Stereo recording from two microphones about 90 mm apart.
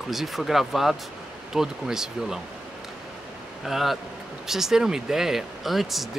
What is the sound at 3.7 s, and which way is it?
Speech, 5° right (ahead or behind).